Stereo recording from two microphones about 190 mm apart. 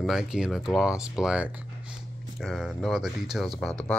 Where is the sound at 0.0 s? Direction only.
Centre (ahead or behind).